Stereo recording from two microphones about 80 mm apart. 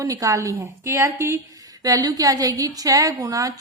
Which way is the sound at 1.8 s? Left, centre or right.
Right.